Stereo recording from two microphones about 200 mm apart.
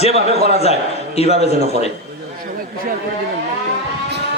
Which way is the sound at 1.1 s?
30° left (ahead or behind).